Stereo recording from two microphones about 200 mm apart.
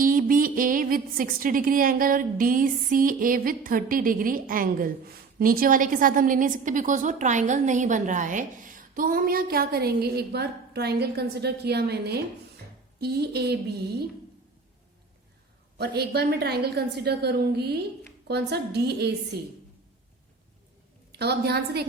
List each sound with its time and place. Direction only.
0.0 s a woman's voice: 45° right (ahead or behind)
15.8 s a woman's voice: 55° right (ahead or behind)
21.1 s a woman's voice: 55° right (ahead or behind)